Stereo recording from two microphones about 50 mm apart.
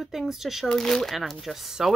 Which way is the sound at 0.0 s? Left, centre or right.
Centre.